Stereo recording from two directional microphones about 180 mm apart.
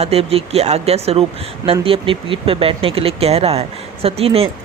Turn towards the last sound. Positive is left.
turn(degrees=-35)  # may be behind; listen again after turning